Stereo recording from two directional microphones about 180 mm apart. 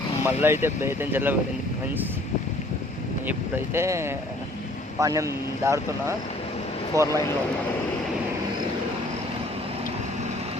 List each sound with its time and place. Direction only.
0.3 s speech: 15° right (ahead or behind)
3.2 s speech: 10° right (ahead or behind)